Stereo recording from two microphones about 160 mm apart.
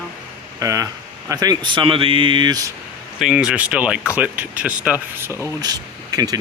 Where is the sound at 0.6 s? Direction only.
20° right (ahead or behind).